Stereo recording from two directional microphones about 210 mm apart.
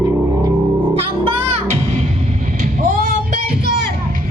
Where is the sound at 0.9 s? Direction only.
25° right (ahead or behind).